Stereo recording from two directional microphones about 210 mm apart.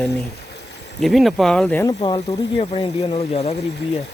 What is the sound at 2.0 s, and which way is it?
Speech, 20° left (ahead or behind).